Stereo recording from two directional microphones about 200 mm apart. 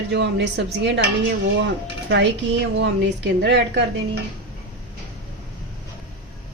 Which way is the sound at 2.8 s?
60° right (ahead or behind).